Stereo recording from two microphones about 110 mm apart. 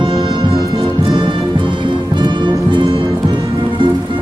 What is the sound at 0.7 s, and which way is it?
Music, 55° right (ahead or behind).